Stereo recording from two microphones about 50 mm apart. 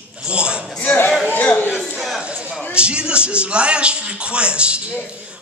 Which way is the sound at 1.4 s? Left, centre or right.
Left.